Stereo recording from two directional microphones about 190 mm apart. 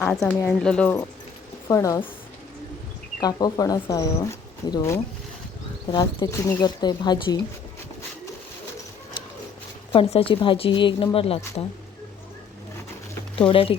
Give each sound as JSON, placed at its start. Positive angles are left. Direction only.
{"t": 0.0, "sound": "a woman's voice", "side_deg": 10}
{"t": 1.6, "sound": "a woman's voice", "side_deg": 15}
{"t": 3.2, "sound": "speech", "side_deg": 20}
{"t": 9.9, "sound": "speech", "side_deg": 30}
{"t": 13.5, "sound": "speech", "side_deg": 30}